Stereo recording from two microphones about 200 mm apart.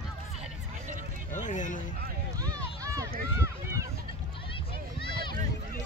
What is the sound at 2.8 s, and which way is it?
Run, 15° right (ahead or behind).